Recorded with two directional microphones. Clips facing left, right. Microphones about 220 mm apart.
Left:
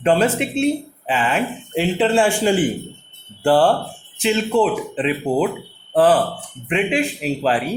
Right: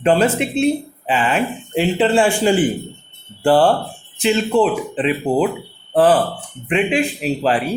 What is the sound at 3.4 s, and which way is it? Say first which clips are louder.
Speech: right 1 dB; 15° right (ahead or behind).